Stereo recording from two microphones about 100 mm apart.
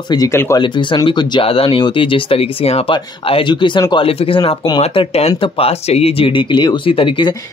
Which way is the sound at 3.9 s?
70° left (ahead or behind).